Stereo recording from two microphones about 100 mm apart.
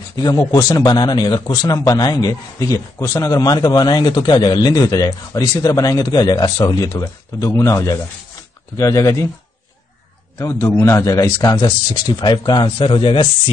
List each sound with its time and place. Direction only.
0.2 s speech: 40° left (ahead or behind)
10.4 s speech: 30° left (ahead or behind); by 13.3 s 60° left (ahead or behind)